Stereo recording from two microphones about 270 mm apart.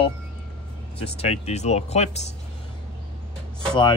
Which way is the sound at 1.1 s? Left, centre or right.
Left.